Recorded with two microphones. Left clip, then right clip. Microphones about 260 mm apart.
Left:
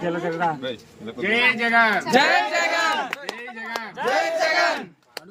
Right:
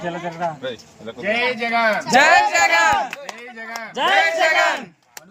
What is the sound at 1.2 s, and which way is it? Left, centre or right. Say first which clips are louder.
A man's voice: left 1 dB; centre.